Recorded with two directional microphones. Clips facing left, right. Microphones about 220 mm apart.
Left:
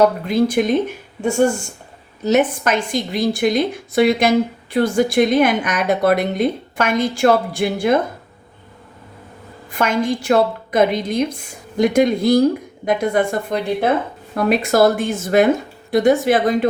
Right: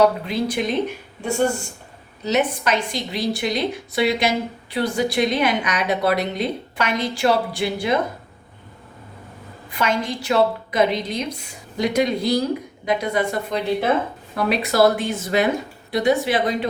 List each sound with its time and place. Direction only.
0.3 s a woman's voice: 50° left (ahead or behind)
9.6 s a woman's voice: 50° left (ahead or behind)